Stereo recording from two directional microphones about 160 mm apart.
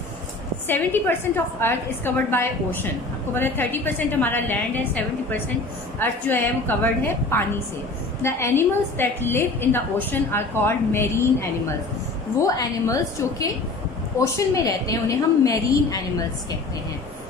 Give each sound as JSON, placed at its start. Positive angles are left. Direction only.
{"t": 0.7, "sound": "a woman's voice", "side_deg": 10}
{"t": 12.4, "sound": "a woman's voice", "side_deg": 20}